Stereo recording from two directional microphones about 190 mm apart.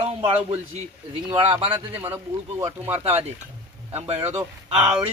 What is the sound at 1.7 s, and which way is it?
A man's voice, 10° right (ahead or behind).